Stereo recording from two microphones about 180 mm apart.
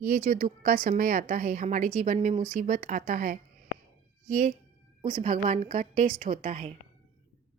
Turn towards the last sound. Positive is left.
turn(degrees=-50)  # may be behind; listen again after turning